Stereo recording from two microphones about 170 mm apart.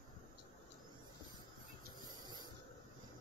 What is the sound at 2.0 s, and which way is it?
Hiss, 25° right (ahead or behind).